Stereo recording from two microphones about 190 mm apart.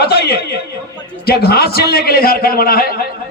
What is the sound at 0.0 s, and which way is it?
Chuckle, 55° left (ahead or behind).